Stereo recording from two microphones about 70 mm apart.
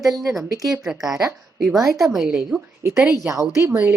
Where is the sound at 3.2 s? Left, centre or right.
Right.